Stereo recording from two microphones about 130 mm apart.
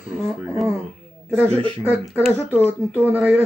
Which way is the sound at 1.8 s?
15° right (ahead or behind).